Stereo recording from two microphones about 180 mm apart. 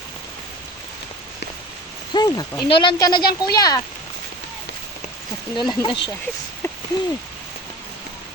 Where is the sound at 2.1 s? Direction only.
25° left (ahead or behind).